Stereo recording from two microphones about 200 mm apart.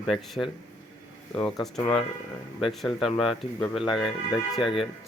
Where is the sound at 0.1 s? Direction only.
Centre (ahead or behind).